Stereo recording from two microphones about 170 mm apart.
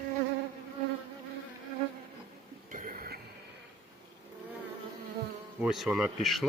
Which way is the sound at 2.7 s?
55° right (ahead or behind).